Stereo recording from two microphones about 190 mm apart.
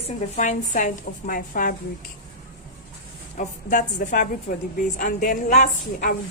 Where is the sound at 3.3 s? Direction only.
45° left (ahead or behind).